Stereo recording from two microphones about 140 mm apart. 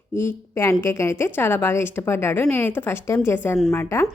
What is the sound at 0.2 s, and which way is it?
A woman's voice, 20° left (ahead or behind).